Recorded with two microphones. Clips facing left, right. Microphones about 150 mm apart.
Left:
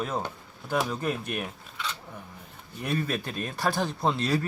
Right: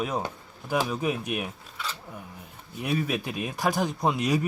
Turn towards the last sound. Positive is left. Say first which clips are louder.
# right 1 dB
turn(degrees=-15)  # may be behind; listen again after turning